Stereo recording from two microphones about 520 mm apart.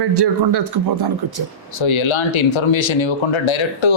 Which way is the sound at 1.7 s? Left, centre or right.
Left.